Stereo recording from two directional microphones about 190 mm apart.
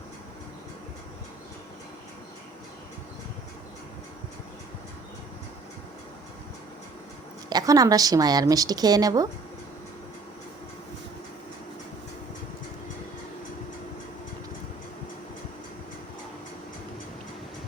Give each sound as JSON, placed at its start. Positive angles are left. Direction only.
{"t": 7.5, "sound": "a woman's voice", "side_deg": -20}